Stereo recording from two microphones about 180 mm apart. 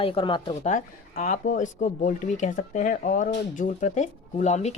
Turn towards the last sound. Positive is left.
turn(degrees=40)  # may be behind; listen again after turning